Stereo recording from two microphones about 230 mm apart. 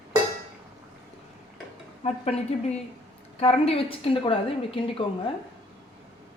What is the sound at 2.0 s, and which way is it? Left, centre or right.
A woman's voice, left.